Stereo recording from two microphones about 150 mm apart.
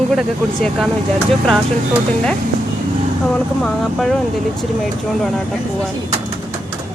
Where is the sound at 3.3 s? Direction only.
5° left (ahead or behind).